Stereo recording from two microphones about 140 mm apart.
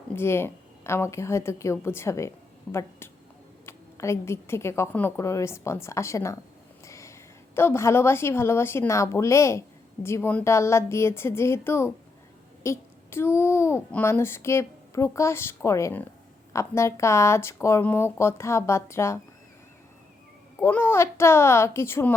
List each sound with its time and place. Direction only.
0.1 s a child's voice: 15° left (ahead or behind)
20.6 s a child's voice: 15° left (ahead or behind)